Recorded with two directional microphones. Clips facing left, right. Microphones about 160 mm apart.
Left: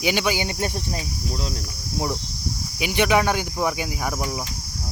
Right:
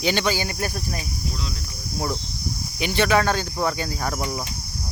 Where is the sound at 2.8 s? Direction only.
10° left (ahead or behind).